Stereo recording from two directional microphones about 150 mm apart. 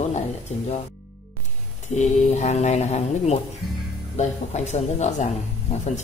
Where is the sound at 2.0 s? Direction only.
50° left (ahead or behind).